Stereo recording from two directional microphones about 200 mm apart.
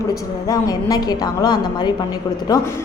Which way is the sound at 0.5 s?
20° left (ahead or behind).